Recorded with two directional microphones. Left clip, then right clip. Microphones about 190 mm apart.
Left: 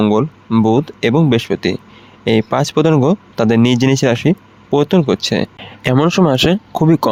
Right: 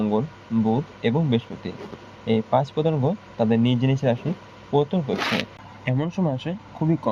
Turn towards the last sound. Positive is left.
turn(degrees=70)  # may be behind; listen again after turning